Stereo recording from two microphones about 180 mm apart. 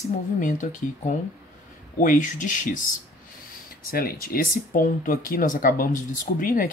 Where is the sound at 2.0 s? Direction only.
45° left (ahead or behind).